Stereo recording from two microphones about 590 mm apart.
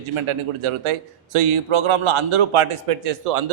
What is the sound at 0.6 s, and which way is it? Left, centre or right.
A man's voice, right.